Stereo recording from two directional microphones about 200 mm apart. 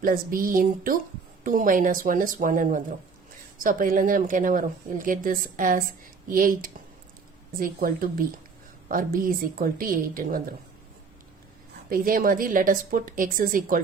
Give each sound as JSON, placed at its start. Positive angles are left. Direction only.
{"t": 0.0, "sound": "speech", "side_deg": -45}
{"t": 11.9, "sound": "speech", "side_deg": -45}